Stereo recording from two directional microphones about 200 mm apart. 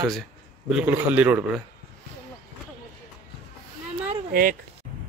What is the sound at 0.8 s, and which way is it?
Speech, 5° right (ahead or behind).